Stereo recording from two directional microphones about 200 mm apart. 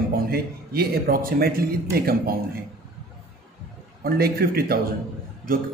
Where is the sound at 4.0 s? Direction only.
50° right (ahead or behind).